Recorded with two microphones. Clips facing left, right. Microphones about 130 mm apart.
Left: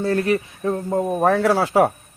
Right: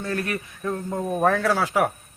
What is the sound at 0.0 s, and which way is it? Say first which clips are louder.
A man's voice: left 8 dB; 30° left (ahead or behind).